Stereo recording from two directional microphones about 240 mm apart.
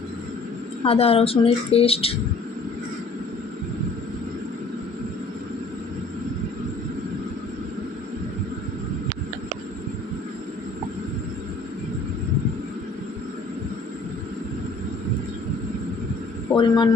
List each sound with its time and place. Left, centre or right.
0.9 s speech: left
16.6 s speech: centre